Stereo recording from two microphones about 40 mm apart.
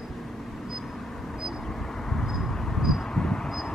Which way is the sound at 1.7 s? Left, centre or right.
Centre.